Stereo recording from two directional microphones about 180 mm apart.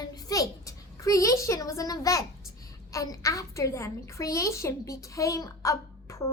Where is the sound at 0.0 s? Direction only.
20° left (ahead or behind).